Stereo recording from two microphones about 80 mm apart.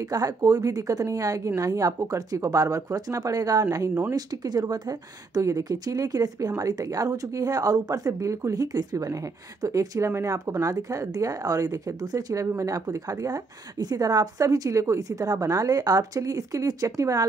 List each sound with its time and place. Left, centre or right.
0.0 s a woman's voice: right
3.6 s speech: right
4.1 s a woman's voice: right